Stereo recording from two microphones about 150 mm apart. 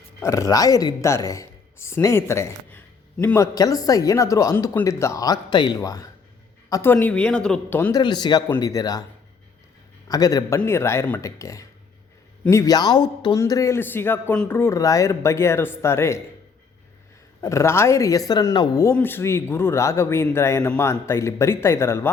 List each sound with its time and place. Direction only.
0.2 s a woman's voice: 20° left (ahead or behind)
6.9 s speech: 10° left (ahead or behind)
7.9 s speech: 30° left (ahead or behind)
10.1 s speech: 25° left (ahead or behind)
17.4 s speech: 20° left (ahead or behind)